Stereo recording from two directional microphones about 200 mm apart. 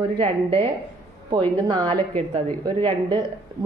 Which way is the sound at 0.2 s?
30° right (ahead or behind).